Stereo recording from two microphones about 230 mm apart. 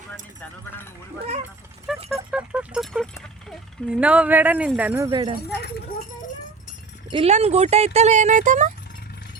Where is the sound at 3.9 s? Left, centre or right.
Centre.